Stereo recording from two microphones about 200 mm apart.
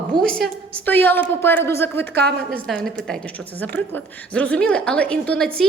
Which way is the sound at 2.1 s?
55° right (ahead or behind).